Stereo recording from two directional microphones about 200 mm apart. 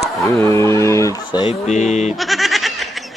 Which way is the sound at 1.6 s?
35° left (ahead or behind).